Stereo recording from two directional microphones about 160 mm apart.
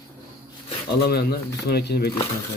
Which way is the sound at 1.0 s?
80° left.